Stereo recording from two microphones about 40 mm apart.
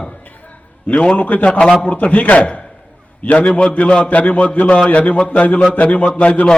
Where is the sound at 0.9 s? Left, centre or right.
Left.